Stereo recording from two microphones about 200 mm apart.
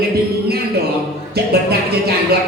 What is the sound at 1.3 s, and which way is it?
Speech, 50° right (ahead or behind).